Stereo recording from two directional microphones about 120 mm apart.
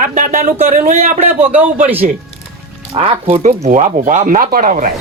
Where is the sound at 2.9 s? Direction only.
55° right (ahead or behind).